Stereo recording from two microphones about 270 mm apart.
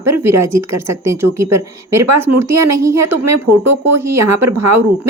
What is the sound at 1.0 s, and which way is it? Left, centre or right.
Speech, centre.